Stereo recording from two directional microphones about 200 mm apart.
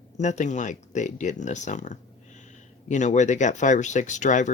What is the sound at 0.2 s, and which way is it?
Speech, 35° left (ahead or behind).